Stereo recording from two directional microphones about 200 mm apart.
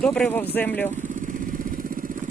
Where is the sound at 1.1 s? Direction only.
40° right (ahead or behind).